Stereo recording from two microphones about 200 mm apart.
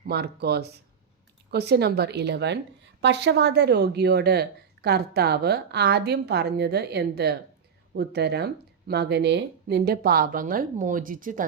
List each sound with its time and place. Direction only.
0.0 s a woman's voice: 55° right (ahead or behind)